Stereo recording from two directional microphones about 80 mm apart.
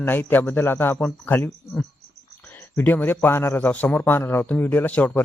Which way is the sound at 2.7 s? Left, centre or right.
Left.